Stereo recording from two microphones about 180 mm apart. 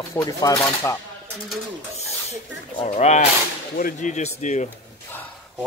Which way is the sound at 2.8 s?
40° left (ahead or behind).